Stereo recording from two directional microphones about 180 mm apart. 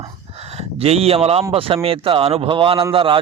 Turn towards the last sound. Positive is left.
turn(degrees=-30)  # may be behind; listen again after turning